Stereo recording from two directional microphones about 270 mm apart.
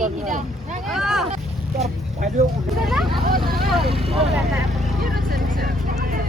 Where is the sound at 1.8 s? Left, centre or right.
Right.